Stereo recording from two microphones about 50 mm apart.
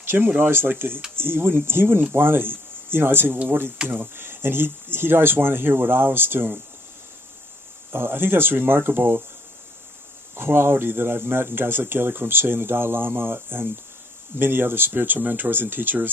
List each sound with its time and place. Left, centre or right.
0.0 s a sound: right
0.3 s speech: right
7.9 s speech: right
10.3 s speech: right